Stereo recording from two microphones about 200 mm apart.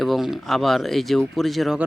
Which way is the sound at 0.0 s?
Centre (ahead or behind).